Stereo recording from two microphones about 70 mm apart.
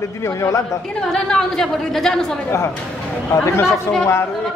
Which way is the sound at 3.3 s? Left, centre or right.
Left.